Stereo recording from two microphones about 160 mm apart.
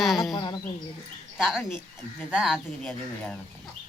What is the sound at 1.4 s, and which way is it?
Speech, centre (ahead or behind).